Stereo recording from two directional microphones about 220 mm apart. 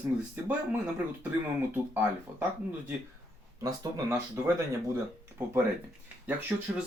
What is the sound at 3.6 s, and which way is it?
Speech, 15° right (ahead or behind).